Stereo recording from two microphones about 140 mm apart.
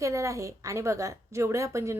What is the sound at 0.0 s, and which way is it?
A woman's voice, 20° right (ahead or behind).